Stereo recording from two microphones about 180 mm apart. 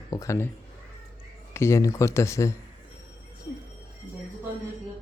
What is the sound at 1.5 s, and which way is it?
Speech, 15° left (ahead or behind).